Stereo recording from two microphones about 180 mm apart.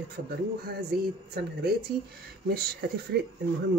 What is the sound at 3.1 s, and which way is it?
Speech, 65° right (ahead or behind).